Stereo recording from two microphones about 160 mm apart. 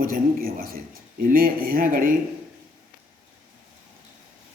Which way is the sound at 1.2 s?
65° right (ahead or behind).